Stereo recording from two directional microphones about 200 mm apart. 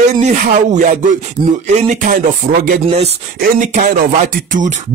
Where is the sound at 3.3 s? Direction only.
40° right (ahead or behind).